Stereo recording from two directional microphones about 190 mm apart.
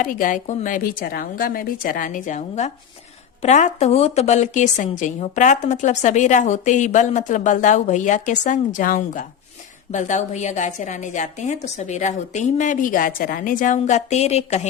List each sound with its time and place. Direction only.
0.0 s a woman's voice: 45° left (ahead or behind)